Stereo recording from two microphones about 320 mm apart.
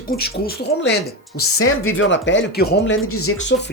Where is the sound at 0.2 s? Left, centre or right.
Left.